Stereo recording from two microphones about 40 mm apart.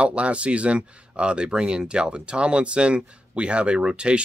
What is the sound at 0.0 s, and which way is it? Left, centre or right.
Speech, right.